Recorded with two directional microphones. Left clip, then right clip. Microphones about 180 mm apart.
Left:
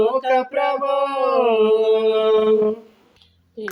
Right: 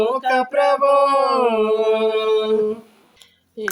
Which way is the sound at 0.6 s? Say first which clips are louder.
Right 5 dB; 30° right (ahead or behind).